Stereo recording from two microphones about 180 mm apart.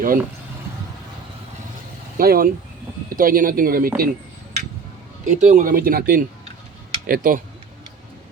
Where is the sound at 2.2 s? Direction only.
55° right (ahead or behind).